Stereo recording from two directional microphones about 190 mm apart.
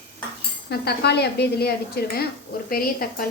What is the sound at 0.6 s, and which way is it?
A woman's voice, 60° left (ahead or behind).